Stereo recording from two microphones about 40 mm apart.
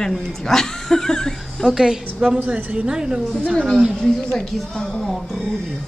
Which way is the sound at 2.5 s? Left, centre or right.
Right.